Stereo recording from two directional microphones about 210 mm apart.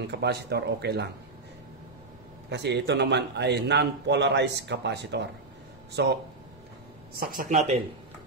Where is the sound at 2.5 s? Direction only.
55° right (ahead or behind); by 7.8 s 35° right (ahead or behind).